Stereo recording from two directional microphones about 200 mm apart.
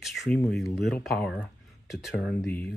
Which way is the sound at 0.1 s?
Centre (ahead or behind).